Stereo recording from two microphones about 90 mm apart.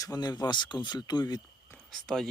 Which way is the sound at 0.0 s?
45° left (ahead or behind).